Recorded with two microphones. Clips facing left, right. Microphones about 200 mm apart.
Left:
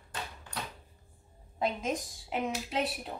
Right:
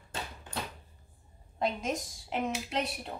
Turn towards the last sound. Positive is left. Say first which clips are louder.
# left 1 dB
turn(degrees=0)  # may be behind; listen again after turning